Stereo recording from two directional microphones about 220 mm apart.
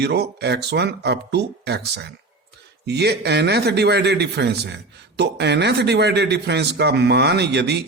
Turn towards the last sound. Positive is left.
turn(degrees=-50)  # may be behind; listen again after turning